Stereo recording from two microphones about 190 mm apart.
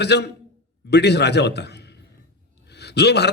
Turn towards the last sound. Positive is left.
turn(degrees=60)  # may be behind; listen again after turning